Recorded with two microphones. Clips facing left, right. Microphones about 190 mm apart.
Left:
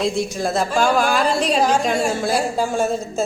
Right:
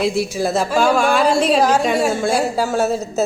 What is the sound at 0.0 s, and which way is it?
Speech, 5° right (ahead or behind).